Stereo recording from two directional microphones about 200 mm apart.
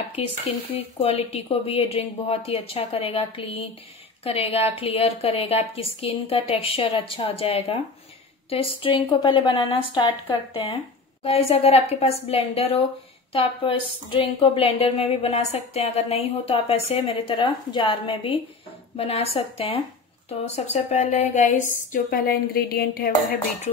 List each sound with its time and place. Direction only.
0.7 s a woman's voice: 30° left (ahead or behind); by 23.1 s 50° left (ahead or behind)